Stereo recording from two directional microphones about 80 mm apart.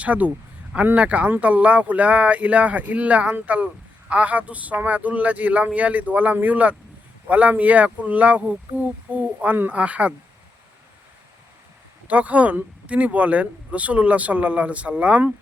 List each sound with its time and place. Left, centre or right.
0.0 s speech: centre
12.0 s speech: centre